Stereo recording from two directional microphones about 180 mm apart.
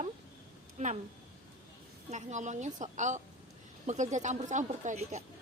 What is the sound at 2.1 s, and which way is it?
A woman's voice, 40° right (ahead or behind).